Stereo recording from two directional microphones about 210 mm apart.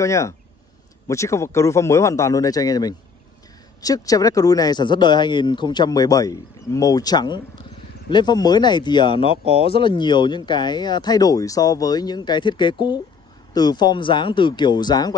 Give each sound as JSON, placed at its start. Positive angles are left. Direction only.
{"t": 0.0, "sound": "a man's voice", "side_deg": 15}